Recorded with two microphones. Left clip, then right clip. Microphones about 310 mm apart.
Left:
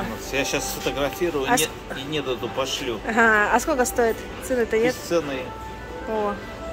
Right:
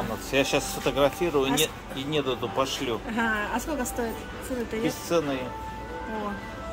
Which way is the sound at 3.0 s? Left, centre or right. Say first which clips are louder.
Left 13 dB; centre.